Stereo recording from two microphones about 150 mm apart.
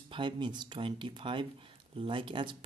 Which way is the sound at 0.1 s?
30° right (ahead or behind).